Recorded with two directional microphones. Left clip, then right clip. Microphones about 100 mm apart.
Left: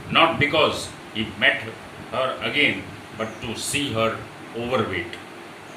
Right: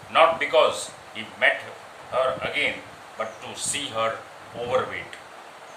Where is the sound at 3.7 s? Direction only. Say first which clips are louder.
Left 6 dB; 65° right (ahead or behind).